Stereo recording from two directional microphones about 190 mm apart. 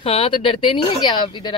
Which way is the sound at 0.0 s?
30° left (ahead or behind).